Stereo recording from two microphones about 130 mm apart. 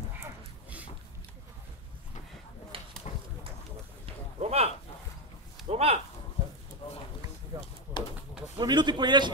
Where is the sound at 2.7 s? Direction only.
45° right (ahead or behind).